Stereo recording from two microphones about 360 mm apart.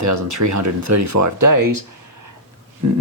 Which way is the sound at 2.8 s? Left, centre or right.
Right.